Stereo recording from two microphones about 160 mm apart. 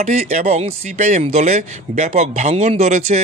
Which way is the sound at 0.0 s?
45° right (ahead or behind).